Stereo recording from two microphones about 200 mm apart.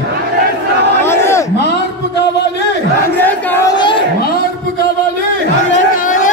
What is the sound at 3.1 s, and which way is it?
Crowd, 10° left (ahead or behind).